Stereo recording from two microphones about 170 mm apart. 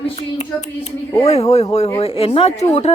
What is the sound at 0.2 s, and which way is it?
Speech, 40° left (ahead or behind).